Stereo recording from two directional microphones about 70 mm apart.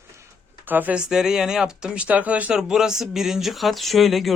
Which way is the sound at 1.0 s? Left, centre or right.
Centre.